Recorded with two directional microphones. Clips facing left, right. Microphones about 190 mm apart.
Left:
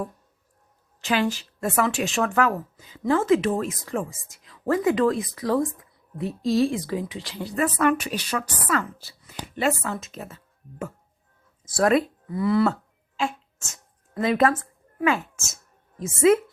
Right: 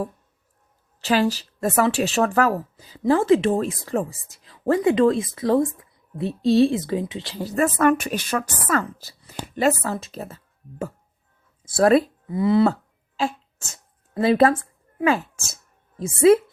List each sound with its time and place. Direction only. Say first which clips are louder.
1.0 s a woman's voice: right 3 dB; 35° right (ahead or behind)
7.3 s a woman's voice: right 3 dB; 45° right (ahead or behind)
12.3 s a woman's voice: right 3 dB; 20° right (ahead or behind)
13.1 s a sound: right 2 dB; 35° right (ahead or behind)
16.0 s speech: right 3 dB; 30° right (ahead or behind)